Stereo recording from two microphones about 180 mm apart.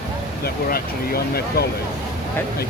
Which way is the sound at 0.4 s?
60° left (ahead or behind).